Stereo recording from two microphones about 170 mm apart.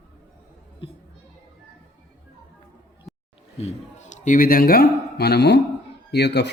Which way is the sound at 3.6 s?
45° left (ahead or behind).